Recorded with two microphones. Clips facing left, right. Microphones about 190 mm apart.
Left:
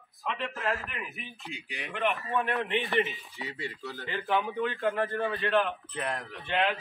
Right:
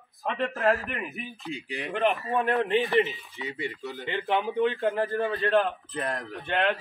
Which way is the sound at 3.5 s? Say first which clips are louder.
Right 5 dB; 20° right (ahead or behind).